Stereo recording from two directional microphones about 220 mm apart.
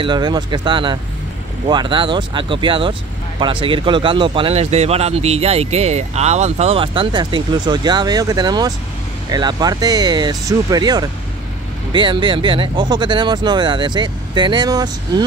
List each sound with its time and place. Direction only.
0.0 s speech: 20° right (ahead or behind)